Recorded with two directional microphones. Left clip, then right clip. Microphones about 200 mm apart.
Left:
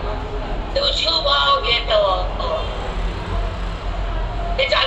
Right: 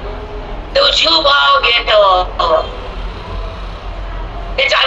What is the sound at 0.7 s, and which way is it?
Speech, 45° right (ahead or behind).